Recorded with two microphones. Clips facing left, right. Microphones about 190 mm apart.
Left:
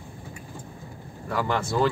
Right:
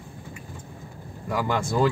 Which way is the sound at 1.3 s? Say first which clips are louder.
Right 1 dB; 10° right (ahead or behind).